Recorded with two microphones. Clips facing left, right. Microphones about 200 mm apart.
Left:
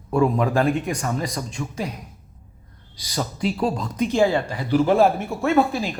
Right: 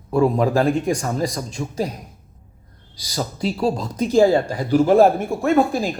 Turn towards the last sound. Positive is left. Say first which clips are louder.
# right 2 dB
turn(degrees=-45)  # may be behind; listen again after turning